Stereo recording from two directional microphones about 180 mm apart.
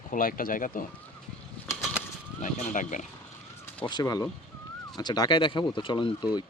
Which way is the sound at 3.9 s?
20° left (ahead or behind).